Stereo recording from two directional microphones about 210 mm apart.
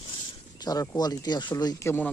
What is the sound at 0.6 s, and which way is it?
Speech, 20° left (ahead or behind).